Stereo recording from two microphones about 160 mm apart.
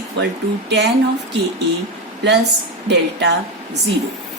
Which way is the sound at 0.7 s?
90° right.